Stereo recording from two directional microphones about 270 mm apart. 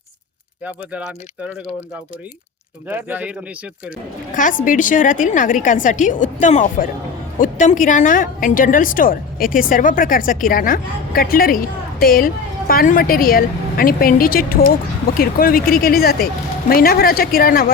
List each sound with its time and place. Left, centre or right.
0.6 s speech: centre
2.9 s speech: centre
4.4 s a woman's voice: left